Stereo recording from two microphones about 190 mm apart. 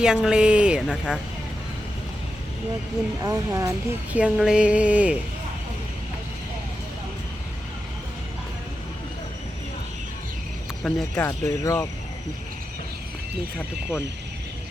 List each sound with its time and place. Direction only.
0.0 s speech: 5° right (ahead or behind)
3.2 s speech: 15° right (ahead or behind)
4.2 s speech: 5° right (ahead or behind)
10.8 s speech: 5° left (ahead or behind)
11.3 s speech: 15° left (ahead or behind)